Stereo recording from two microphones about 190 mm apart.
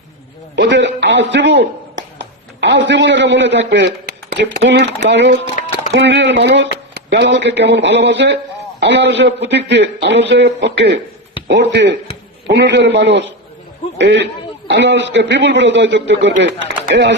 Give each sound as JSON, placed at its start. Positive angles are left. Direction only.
{"t": 0.5, "sound": "a man's voice", "side_deg": -70}